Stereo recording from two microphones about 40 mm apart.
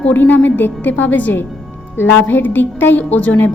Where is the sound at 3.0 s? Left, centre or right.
Left.